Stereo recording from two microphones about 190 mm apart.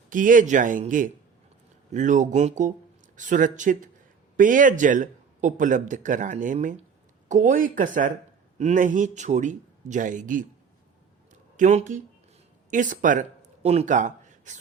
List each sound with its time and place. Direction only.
0.1 s a man's voice: 45° right (ahead or behind)
11.5 s speech: 40° right (ahead or behind)